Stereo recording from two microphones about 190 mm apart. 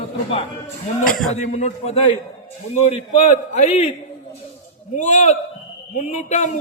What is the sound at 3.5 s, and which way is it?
Speech, 35° left (ahead or behind).